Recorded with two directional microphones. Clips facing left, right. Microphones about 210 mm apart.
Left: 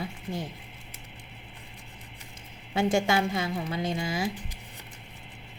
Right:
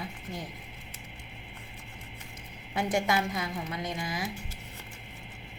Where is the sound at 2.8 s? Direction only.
25° left (ahead or behind).